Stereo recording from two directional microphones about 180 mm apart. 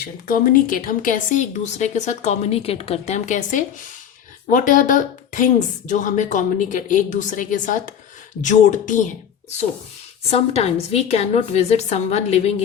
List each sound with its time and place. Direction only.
0.0 s a woman's voice: 50° left (ahead or behind)
10.2 s a woman's voice: 35° left (ahead or behind)